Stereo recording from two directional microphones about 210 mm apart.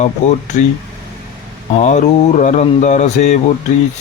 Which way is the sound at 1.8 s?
35° left (ahead or behind).